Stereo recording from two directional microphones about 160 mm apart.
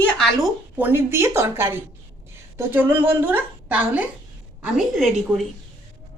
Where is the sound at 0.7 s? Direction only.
10° right (ahead or behind).